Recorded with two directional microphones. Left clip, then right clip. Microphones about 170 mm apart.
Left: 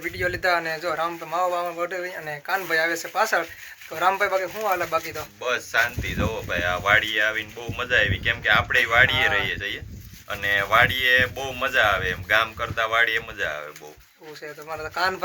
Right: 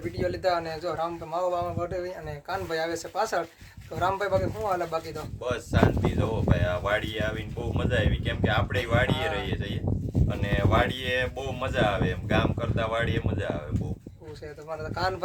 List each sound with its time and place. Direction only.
0.2 s a man's voice: centre (ahead or behind)
5.4 s speech: 20° right (ahead or behind)
14.7 s speech: 5° left (ahead or behind)